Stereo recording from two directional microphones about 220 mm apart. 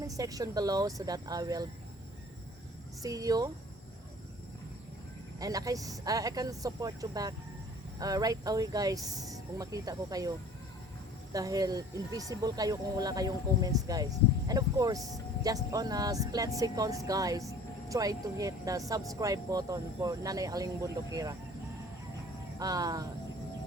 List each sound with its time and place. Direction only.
0.0 s speech: 15° right (ahead or behind)
3.0 s speech: 15° right (ahead or behind)
5.4 s speech: 15° right (ahead or behind)
22.5 s speech: 15° right (ahead or behind)